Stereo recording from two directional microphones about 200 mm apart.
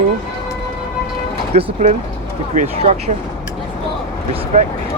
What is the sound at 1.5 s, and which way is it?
Speech, 30° right (ahead or behind).